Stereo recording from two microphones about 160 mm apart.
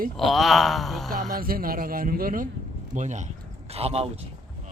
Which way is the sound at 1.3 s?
65° right (ahead or behind).